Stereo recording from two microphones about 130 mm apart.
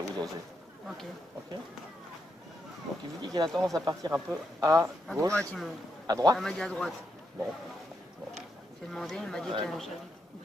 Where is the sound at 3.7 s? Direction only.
25° right (ahead or behind).